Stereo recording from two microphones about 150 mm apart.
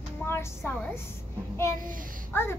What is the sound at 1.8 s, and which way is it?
Speech, 65° right (ahead or behind).